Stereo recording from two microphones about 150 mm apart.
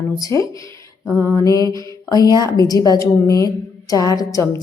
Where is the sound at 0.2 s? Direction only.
20° left (ahead or behind).